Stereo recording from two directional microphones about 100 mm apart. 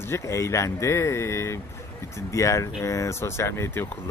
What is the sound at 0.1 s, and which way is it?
Speech, 30° left (ahead or behind).